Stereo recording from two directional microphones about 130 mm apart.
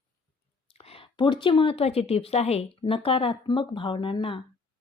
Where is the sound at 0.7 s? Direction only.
50° left (ahead or behind).